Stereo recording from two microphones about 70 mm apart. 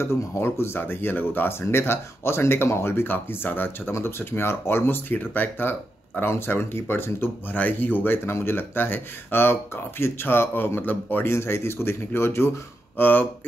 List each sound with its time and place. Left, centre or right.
0.0 s speech: left